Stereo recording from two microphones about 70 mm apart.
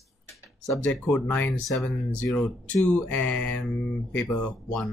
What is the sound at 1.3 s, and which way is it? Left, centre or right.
Speech, left.